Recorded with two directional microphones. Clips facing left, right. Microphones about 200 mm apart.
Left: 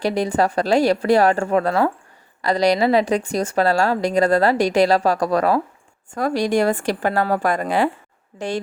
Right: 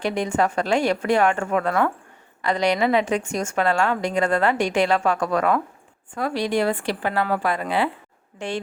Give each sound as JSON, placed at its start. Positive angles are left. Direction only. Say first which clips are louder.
{"t": 0.0, "sound": "a woman's voice", "louder": "left 3 dB", "side_deg": 35}